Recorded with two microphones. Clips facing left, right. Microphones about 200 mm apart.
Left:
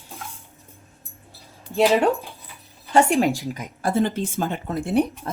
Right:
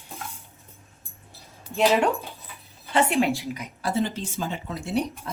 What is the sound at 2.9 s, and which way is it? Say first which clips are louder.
Speech: left 4 dB; 45° left (ahead or behind).